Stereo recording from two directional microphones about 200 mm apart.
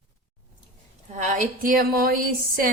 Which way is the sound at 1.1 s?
40° right (ahead or behind).